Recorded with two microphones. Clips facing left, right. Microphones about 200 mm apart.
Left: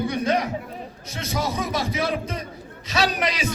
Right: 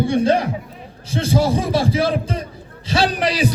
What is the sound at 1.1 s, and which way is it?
A man's voice, 30° right (ahead or behind).